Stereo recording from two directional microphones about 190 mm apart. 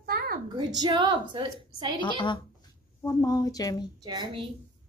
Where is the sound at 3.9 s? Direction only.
20° right (ahead or behind).